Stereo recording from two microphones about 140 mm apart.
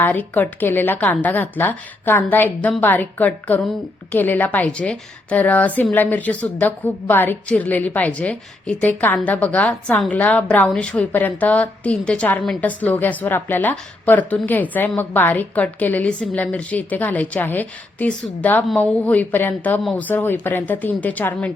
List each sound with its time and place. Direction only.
0.0 s a woman's voice: 15° left (ahead or behind)
19.8 s speech: centre (ahead or behind)
20.1 s a woman's voice: 15° left (ahead or behind)